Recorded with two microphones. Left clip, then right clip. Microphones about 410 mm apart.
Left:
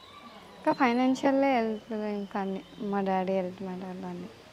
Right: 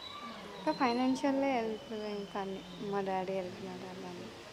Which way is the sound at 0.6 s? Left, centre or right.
Left.